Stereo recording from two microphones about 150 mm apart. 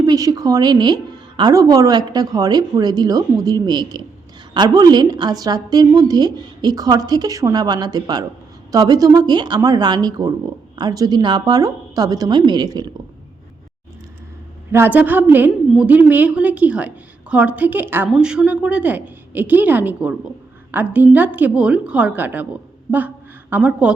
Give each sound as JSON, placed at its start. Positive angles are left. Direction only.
{"t": 0.0, "sound": "a woman's voice", "side_deg": -25}
{"t": 14.7, "sound": "a woman's voice", "side_deg": -15}